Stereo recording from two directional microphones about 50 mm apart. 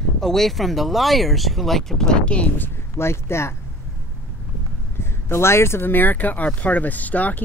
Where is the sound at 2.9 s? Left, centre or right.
Left.